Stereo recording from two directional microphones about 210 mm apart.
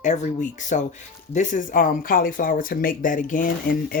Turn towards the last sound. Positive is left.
turn(degrees=40)  # may be behind; listen again after turning